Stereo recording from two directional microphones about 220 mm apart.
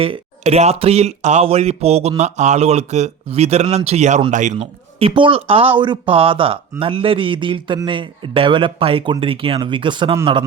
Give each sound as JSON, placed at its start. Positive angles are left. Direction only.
{"t": 0.0, "sound": "speech", "side_deg": -25}